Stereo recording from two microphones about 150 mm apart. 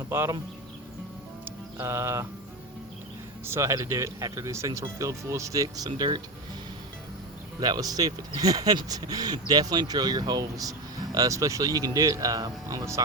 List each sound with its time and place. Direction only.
0.1 s speech: 15° right (ahead or behind)
1.5 s music: 20° right (ahead or behind)
3.4 s speech: 20° right (ahead or behind)
7.6 s speech: 25° right (ahead or behind)